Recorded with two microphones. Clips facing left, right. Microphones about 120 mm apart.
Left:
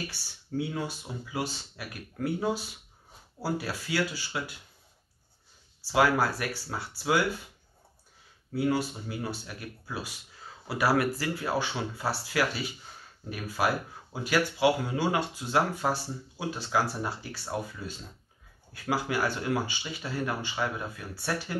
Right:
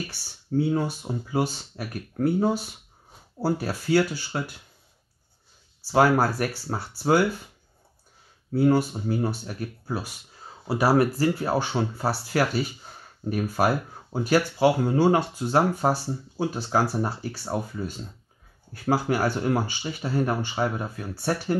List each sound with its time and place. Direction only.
0.6 s speech: 45° right (ahead or behind)
5.9 s speech: 45° right (ahead or behind)
8.5 s speech: 40° right (ahead or behind)